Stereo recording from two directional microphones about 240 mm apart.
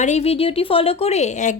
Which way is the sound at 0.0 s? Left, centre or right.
Left.